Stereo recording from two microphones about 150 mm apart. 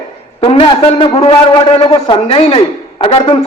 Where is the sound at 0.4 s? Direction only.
40° left (ahead or behind).